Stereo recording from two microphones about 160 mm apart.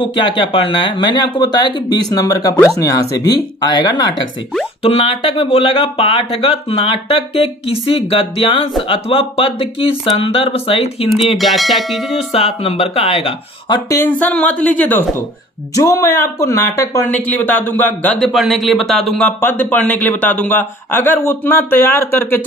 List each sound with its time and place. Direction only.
0.0 s speech: 30° left (ahead or behind)
11.3 s music: centre (ahead or behind)
12.3 s speech: 40° left (ahead or behind)
13.8 s speech: 15° left (ahead or behind)